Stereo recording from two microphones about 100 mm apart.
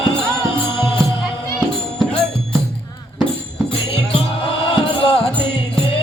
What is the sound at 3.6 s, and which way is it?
Music, 60° left (ahead or behind).